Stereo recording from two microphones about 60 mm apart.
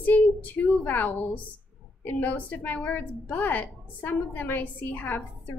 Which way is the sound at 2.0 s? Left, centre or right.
Left.